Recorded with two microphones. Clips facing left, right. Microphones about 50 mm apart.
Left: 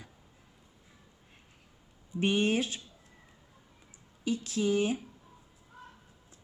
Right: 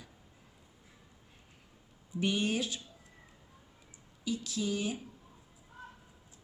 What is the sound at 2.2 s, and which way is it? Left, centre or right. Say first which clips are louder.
Speech: left 4 dB; left.